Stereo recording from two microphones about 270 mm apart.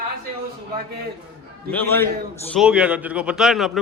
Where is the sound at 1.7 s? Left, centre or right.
Centre.